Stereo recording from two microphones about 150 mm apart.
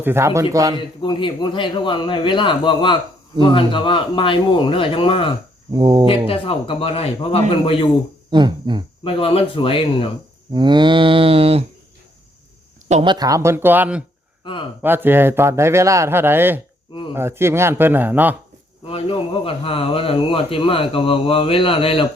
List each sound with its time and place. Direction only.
0.0 s a man's voice: 15° right (ahead or behind)
1.0 s speech: 30° left (ahead or behind)
5.7 s speech: 30° right (ahead or behind)
6.1 s speech: 40° left (ahead or behind)
8.3 s livestock: 30° right (ahead or behind)
9.0 s speech: 35° left (ahead or behind)
10.5 s livestock: 30° right (ahead or behind)
12.9 s speech: 35° right (ahead or behind); by 14.0 s 10° right (ahead or behind)
14.4 s speech: 35° left (ahead or behind)
14.8 s a man's voice: 15° right (ahead or behind)
18.9 s speech: 35° left (ahead or behind)